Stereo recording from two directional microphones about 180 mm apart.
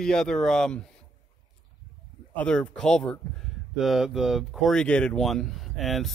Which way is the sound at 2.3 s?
5° left (ahead or behind).